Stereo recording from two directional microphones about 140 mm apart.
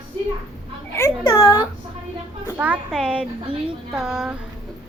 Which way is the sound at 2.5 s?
10° right (ahead or behind).